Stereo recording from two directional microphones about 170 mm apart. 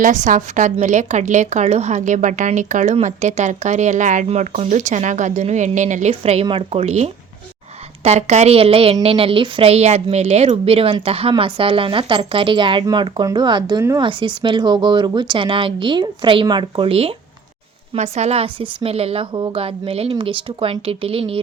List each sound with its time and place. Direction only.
0.0 s a woman's voice: 45° right (ahead or behind)